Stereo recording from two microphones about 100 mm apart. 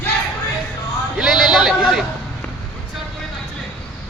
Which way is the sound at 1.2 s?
5° right (ahead or behind).